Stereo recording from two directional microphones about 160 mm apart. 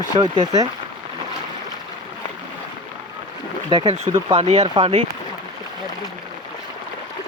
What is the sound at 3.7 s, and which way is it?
Speech, 30° right (ahead or behind).